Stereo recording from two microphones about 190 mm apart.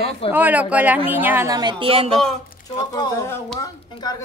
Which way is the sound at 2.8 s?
20° left (ahead or behind).